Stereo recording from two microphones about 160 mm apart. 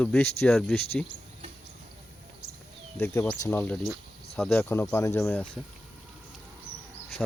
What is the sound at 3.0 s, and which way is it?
Speech, 15° left (ahead or behind).